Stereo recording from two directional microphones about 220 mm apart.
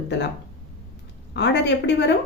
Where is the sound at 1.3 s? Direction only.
50° left (ahead or behind).